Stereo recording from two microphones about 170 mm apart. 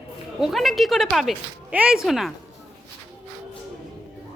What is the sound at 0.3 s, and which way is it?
A woman's voice, centre (ahead or behind).